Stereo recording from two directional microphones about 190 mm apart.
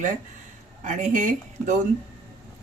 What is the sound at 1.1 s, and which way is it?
Speech, 40° right (ahead or behind).